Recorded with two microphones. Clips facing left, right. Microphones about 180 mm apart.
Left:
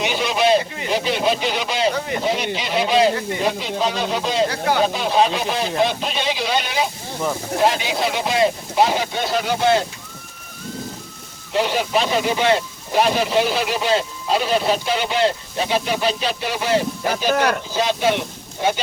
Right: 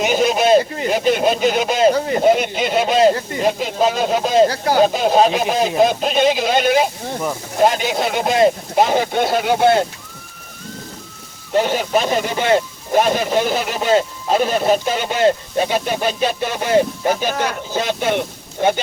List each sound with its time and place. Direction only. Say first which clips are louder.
0.0 s speech: right 4 dB; 45° right (ahead or behind)
11.5 s speech: right 3 dB; 45° right (ahead or behind)